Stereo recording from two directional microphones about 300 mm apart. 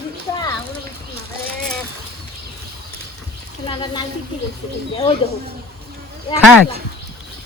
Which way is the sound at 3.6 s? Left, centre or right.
Centre.